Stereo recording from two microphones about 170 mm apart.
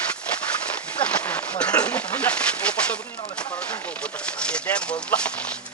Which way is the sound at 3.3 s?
5° left (ahead or behind).